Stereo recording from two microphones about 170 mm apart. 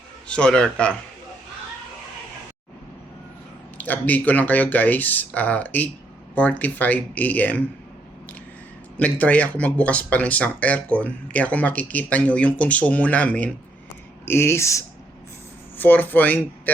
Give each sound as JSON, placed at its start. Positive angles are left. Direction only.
{"t": 0.3, "sound": "speech", "side_deg": 5}
{"t": 3.8, "sound": "speech", "side_deg": 10}
{"t": 9.0, "sound": "speech", "side_deg": 10}